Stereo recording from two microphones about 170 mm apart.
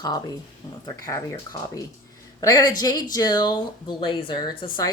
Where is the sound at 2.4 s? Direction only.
20° left (ahead or behind).